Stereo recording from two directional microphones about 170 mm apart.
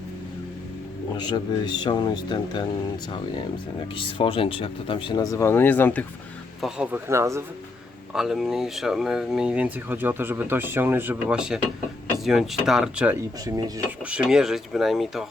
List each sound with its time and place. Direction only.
1.1 s speech: 25° left (ahead or behind)
3.9 s speech: 30° left (ahead or behind); by 6.1 s 10° left (ahead or behind)
6.6 s speech: 5° right (ahead or behind)
7.1 s speech: 15° right (ahead or behind)
8.1 s speech: centre (ahead or behind)